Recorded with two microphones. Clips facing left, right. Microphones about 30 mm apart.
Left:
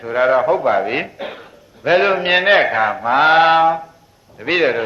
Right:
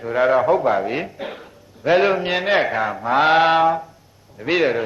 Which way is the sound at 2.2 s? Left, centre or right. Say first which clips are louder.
Left 6 dB; left.